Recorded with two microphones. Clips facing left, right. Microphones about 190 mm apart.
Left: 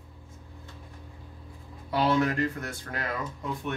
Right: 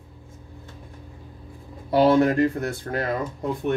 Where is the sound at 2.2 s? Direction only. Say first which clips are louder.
Right 7 dB; 30° right (ahead or behind).